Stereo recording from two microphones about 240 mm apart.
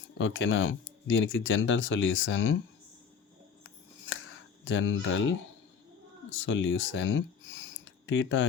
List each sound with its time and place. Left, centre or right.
0.2 s speech: left
3.6 s a sound: left
4.6 s speech: left
6.3 s speech: left